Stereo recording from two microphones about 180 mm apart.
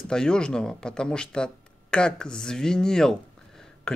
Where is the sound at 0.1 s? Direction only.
5° left (ahead or behind).